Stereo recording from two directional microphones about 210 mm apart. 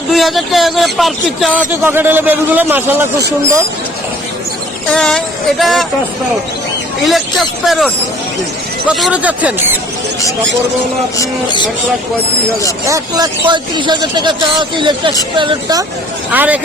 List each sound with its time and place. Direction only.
0.1 s speech: centre (ahead or behind)
4.9 s speech: 5° left (ahead or behind)
7.1 s speech: centre (ahead or behind)
11.2 s speech: 20° left (ahead or behind)
12.8 s speech: 15° right (ahead or behind)
16.3 s speech: 10° right (ahead or behind)